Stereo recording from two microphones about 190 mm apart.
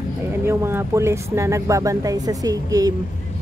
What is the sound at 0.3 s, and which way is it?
Speech, 15° right (ahead or behind).